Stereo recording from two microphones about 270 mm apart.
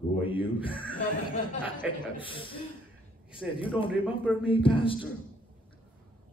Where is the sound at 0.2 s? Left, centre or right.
Centre.